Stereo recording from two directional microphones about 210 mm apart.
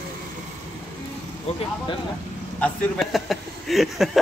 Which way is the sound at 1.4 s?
30° left (ahead or behind).